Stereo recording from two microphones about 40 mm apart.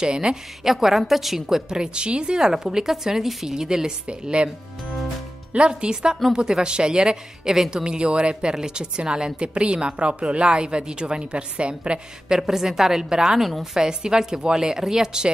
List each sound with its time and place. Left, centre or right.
0.0 s a woman's voice: centre
1.7 s a woman's voice: right; by 3.5 s centre
3.5 s a woman's voice: centre
5.5 s a woman's voice: right; by 7.8 s centre
7.8 s a woman's voice: right
12.3 s a woman's voice: centre
13.4 s a woman's voice: centre
13.7 s a woman's voice: centre